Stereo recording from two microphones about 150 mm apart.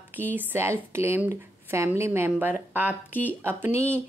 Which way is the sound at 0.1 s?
15° right (ahead or behind).